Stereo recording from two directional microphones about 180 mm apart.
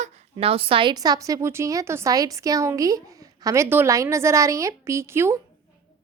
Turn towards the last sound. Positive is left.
turn(degrees=-15)  # may be behind; listen again after turning